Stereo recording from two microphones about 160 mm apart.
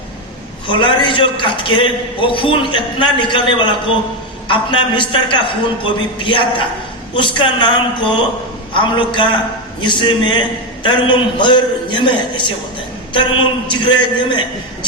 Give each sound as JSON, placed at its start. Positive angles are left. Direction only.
{"t": 0.7, "sound": "a man's voice", "side_deg": 30}